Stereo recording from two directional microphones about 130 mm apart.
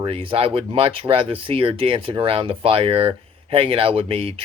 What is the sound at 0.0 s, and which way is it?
Speech, 45° right (ahead or behind).